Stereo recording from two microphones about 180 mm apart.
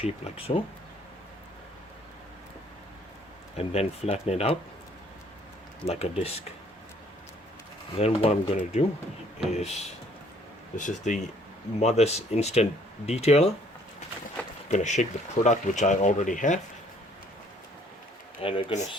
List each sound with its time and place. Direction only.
0.0 s speech: 30° left (ahead or behind)
3.6 s speech: 35° left (ahead or behind)
5.8 s speech: 35° left (ahead or behind)
7.9 s speech: 35° left (ahead or behind)
10.8 s speech: 45° left (ahead or behind)
14.7 s speech: 40° left (ahead or behind)
18.4 s speech: 35° left (ahead or behind)